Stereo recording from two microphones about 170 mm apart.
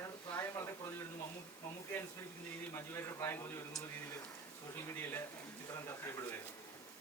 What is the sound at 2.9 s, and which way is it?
Speech, 15° left (ahead or behind).